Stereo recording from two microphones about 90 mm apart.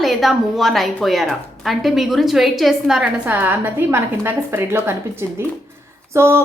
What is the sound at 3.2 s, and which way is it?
A woman's voice, 20° right (ahead or behind).